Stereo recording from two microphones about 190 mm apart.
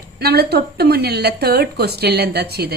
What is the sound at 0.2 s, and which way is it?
A woman's voice, 55° right (ahead or behind).